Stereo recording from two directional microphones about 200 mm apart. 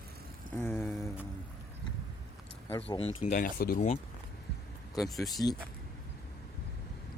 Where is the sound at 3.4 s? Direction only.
45° left (ahead or behind).